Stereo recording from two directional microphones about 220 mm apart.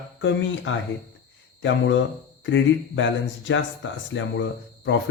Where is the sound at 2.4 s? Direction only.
55° left (ahead or behind).